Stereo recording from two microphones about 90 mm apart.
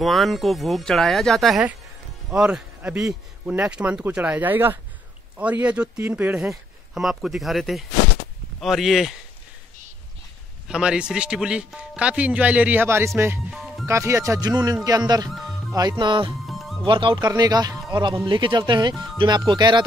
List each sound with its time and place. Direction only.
0.0 s speech: centre (ahead or behind)
2.3 s speech: 10° right (ahead or behind)
6.3 s speech: 5° right (ahead or behind)
10.7 s speech: 10° right (ahead or behind)
12.8 s speech: 30° right (ahead or behind)
13.5 s music: centre (ahead or behind)
13.8 s speech: 30° right (ahead or behind); by 15.2 s 45° right (ahead or behind)
15.2 s speech: centre (ahead or behind)
15.7 s speech: 45° right (ahead or behind)
16.1 s speech: 65° right (ahead or behind)
16.4 s music: centre (ahead or behind)
16.8 s speech: 65° right (ahead or behind)
17.3 s speech: 45° right (ahead or behind)
18.2 s speech: 65° right (ahead or behind)